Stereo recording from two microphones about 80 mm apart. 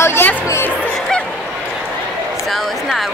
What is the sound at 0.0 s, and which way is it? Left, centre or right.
Music, left.